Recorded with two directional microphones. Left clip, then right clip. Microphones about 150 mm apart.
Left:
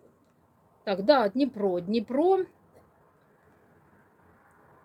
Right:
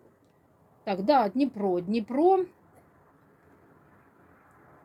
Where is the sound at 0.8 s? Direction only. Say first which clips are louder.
Left 1 dB; 25° left (ahead or behind).